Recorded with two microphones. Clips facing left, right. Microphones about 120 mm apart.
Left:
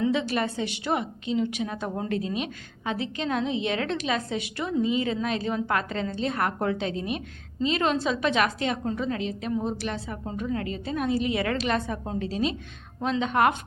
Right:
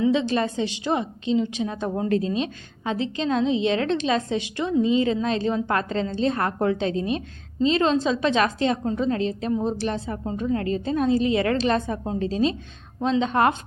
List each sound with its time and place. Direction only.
0.0 s a woman's voice: 25° right (ahead or behind)